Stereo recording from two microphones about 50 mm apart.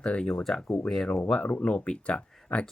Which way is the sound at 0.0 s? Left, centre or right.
Left.